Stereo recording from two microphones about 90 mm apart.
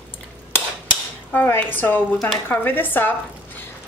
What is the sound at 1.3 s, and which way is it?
Dishes, 25° left (ahead or behind).